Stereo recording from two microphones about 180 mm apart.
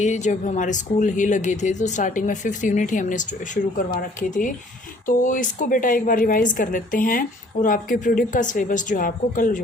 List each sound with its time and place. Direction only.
0.0 s a woman's voice: 40° left (ahead or behind)